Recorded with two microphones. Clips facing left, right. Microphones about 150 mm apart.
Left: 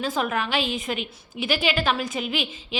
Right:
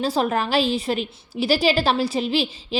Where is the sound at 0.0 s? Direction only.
35° right (ahead or behind).